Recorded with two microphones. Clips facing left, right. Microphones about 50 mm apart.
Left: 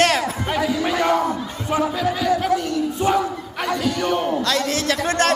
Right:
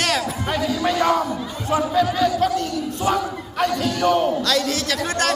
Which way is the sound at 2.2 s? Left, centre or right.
Centre.